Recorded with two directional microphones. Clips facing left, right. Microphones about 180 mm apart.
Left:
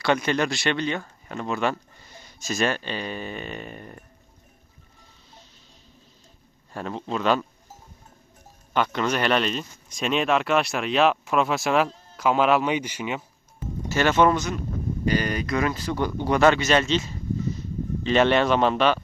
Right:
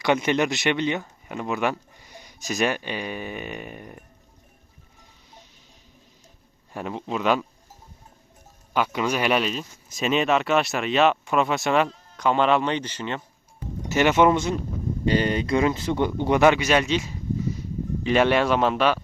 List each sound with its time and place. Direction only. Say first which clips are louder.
0.0 s speech: right 1 dB; 15° right (ahead or behind)
6.7 s speech: even; 15° right (ahead or behind)
8.7 s speech: even; 10° right (ahead or behind); by 13.2 s 10° left (ahead or behind)
13.8 s speech: right 1 dB; 20° right (ahead or behind)